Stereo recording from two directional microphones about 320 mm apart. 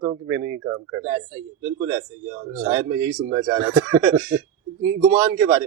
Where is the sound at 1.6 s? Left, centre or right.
Centre.